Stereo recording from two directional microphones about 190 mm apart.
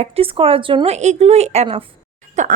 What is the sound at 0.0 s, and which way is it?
Speech, 30° right (ahead or behind).